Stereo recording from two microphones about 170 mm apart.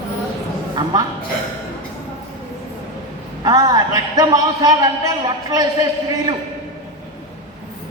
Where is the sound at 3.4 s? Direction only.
25° right (ahead or behind).